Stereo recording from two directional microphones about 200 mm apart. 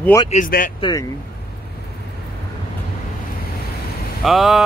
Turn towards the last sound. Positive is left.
turn(degrees=0)  # may be behind; listen again after turning